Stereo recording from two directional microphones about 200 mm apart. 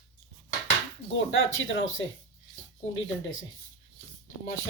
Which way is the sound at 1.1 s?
75° left (ahead or behind).